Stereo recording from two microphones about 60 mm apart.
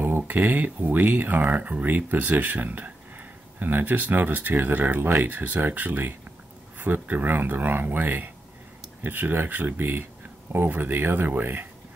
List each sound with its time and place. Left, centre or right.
0.0 s speech: right